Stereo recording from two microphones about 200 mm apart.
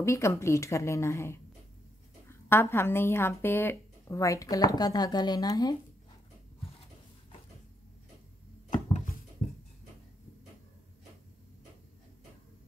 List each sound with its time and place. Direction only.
0.0 s speech: 15° left (ahead or behind)